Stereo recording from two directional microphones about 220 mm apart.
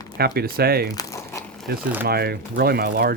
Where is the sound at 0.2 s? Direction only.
45° right (ahead or behind).